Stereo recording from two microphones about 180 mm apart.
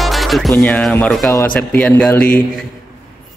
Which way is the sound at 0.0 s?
Centre (ahead or behind).